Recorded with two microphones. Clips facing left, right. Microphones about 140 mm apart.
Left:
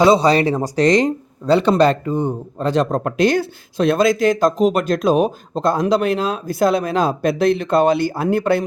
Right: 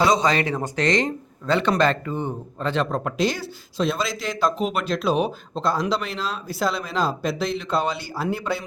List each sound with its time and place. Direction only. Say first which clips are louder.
0.0 s speech: left 7 dB; 30° left (ahead or behind); by 8.6 s 55° left (ahead or behind)